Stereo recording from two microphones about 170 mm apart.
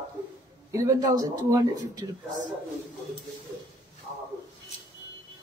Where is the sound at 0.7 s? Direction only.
20° right (ahead or behind).